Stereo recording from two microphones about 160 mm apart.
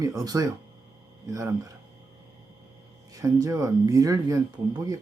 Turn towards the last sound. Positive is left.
turn(degrees=-25)  # may be behind; listen again after turning